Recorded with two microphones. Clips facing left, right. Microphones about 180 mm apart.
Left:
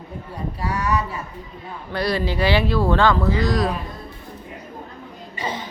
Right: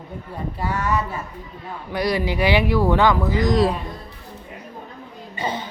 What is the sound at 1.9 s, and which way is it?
Speech, 15° right (ahead or behind).